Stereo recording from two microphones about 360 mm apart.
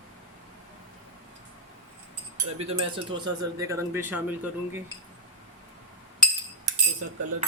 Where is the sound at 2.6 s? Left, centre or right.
Centre.